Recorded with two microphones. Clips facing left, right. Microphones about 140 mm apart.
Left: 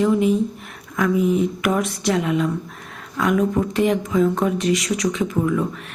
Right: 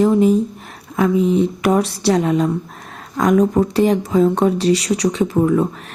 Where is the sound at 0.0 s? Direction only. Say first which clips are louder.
Right 4 dB; 35° right (ahead or behind).